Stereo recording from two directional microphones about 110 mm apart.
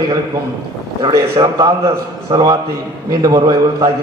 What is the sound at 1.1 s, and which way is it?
Speech, 40° right (ahead or behind).